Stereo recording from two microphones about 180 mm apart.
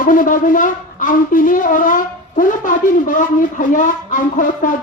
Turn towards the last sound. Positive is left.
turn(degrees=45)  # may be behind; listen again after turning